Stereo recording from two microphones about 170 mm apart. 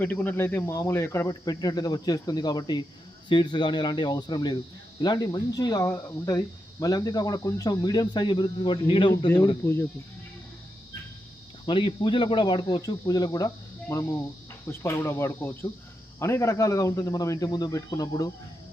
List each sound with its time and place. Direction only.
0.0 s speech: 10° left (ahead or behind); by 9.3 s 30° left (ahead or behind)
9.6 s speech: 15° left (ahead or behind)
11.6 s speech: 30° left (ahead or behind)